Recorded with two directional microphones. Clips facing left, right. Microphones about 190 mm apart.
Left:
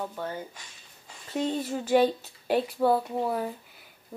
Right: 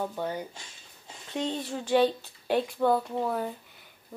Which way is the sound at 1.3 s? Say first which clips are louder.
Left 3 dB; 5° left (ahead or behind).